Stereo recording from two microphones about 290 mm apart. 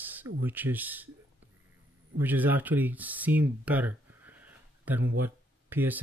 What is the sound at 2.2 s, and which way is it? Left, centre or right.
Speech, centre.